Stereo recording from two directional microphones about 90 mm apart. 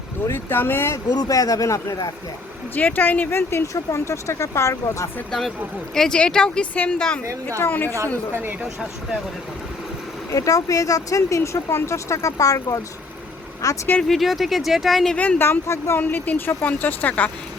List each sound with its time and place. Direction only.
0.3 s speech: 25° left (ahead or behind)
1.1 s speech: 40° left (ahead or behind)
2.7 s speech: 20° left (ahead or behind); by 5.0 s 35° left (ahead or behind)
5.9 s speech: 5° left (ahead or behind)
7.9 s a woman's voice: 35° right (ahead or behind)
10.3 s speech: 40° left (ahead or behind)
14.1 s speech: centre (ahead or behind)
15.1 s speech: 15° left (ahead or behind)
15.4 s speech: 30° left (ahead or behind)
16.0 s speech: 20° left (ahead or behind)